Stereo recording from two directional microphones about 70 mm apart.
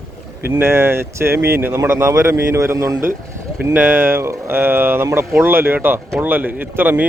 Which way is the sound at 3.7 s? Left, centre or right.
Right.